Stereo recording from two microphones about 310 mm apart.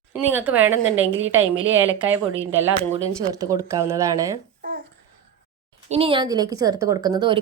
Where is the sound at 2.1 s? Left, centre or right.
Centre.